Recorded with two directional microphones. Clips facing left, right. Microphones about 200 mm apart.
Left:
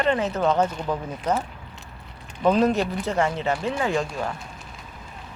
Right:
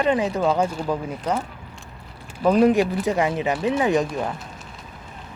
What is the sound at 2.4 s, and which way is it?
Speech, 10° right (ahead or behind).